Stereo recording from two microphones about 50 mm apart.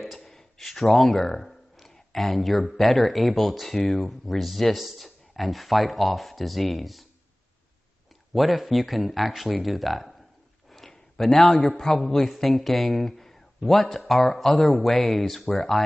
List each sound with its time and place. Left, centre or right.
0.0 s a sound: centre
2.6 s speech: centre
8.3 s a man's voice: centre